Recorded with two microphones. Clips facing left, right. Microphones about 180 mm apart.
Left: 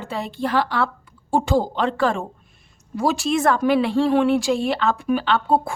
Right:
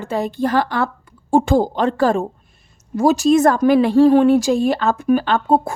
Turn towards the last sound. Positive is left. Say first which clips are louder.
# right 3 dB
turn(degrees=-45)  # may be behind; listen again after turning